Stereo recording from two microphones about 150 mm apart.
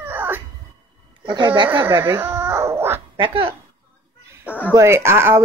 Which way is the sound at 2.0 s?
15° right (ahead or behind).